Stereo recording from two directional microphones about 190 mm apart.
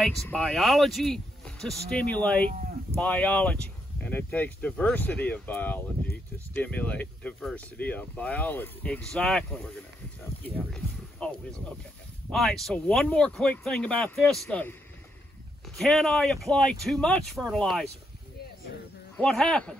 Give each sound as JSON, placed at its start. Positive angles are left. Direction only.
{"t": 0.0, "sound": "speech", "side_deg": 5}
{"t": 19.1, "sound": "speech", "side_deg": 5}